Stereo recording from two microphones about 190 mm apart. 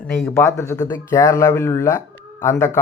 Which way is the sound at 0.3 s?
15° left (ahead or behind).